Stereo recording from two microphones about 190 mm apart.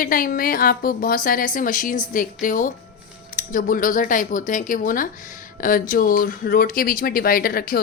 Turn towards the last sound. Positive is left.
turn(degrees=50)  # may be behind; listen again after turning